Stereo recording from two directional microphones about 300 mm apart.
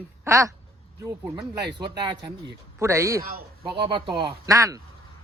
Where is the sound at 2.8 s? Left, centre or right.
Centre.